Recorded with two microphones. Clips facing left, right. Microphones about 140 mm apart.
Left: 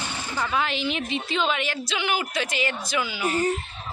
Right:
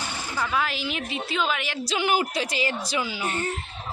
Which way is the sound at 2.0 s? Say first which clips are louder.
Right 3 dB; 35° right (ahead or behind).